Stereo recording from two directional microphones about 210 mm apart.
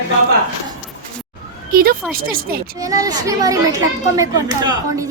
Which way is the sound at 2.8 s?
15° right (ahead or behind).